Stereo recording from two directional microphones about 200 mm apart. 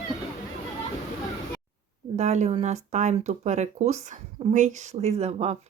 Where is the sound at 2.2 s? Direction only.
35° right (ahead or behind).